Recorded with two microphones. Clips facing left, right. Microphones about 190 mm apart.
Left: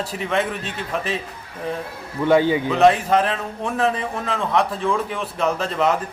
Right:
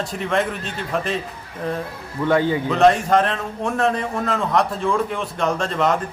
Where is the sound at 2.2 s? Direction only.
15° left (ahead or behind).